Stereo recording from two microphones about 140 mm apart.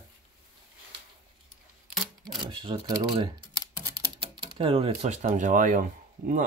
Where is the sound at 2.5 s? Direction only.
35° right (ahead or behind).